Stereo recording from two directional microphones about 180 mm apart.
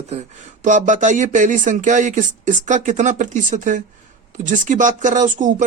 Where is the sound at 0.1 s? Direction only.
40° right (ahead or behind).